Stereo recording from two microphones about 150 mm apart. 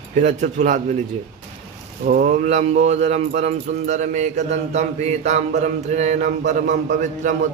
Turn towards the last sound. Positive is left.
turn(degrees=-60)  # may be behind; listen again after turning